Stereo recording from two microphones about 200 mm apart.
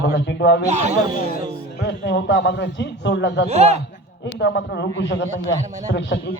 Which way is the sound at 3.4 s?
35° right (ahead or behind).